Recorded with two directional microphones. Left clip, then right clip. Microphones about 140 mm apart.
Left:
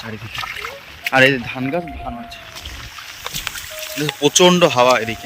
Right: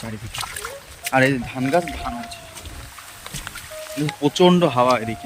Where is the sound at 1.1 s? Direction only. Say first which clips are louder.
Left 5 dB; 20° right (ahead or behind).